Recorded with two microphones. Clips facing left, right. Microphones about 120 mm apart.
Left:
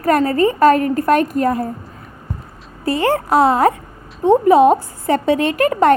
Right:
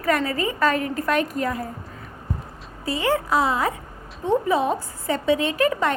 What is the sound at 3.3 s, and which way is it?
A woman's voice, 65° left (ahead or behind).